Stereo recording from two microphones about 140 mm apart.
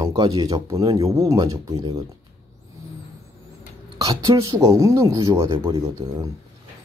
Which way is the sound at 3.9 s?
25° right (ahead or behind).